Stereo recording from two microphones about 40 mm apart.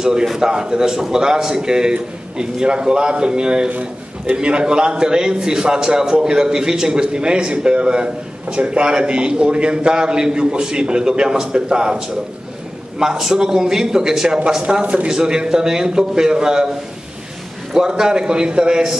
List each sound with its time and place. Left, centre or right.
0.0 s a man's voice: centre
13.0 s a man's voice: centre
14.6 s a man's voice: right
15.0 s a man's voice: centre
17.7 s a man's voice: centre